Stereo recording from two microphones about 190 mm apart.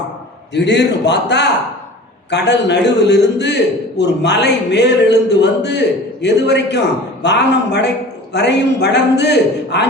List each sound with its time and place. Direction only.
0.5 s a man's voice: 65° left (ahead or behind)